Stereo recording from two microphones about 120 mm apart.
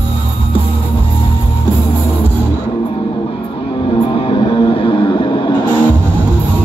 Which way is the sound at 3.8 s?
45° left (ahead or behind).